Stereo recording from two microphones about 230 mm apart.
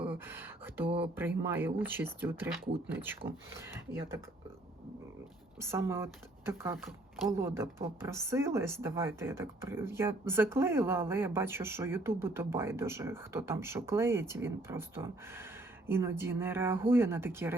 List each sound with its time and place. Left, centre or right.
0.1 s a sound: centre
0.9 s speech: right
1.1 s speech: centre
5.5 s speech: centre